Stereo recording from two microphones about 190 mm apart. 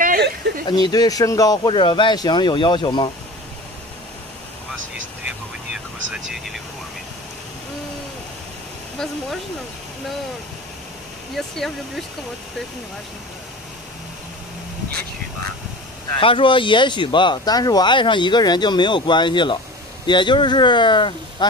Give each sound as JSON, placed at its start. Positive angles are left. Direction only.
{"t": 0.0, "sound": "a sound", "side_deg": -50}
{"t": 0.7, "sound": "speech", "side_deg": 20}
{"t": 6.3, "sound": "vehicle", "side_deg": 0}
{"t": 11.3, "sound": "speech", "side_deg": 0}
{"t": 16.2, "sound": "speech", "side_deg": 25}